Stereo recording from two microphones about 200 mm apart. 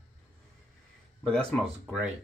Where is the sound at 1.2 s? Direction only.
5° left (ahead or behind).